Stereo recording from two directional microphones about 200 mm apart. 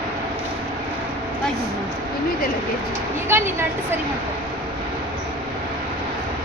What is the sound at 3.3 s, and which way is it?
Speech, 10° right (ahead or behind).